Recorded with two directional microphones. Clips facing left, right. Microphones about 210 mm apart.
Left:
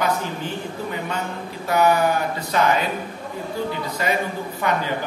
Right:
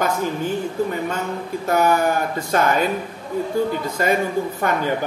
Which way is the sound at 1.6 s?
45° right (ahead or behind).